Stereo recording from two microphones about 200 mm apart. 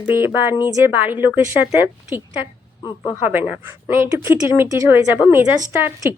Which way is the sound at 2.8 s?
20° left (ahead or behind).